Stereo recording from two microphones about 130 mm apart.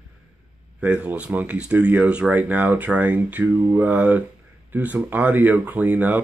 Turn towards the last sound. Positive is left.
turn(degrees=-10)  # may be behind; listen again after turning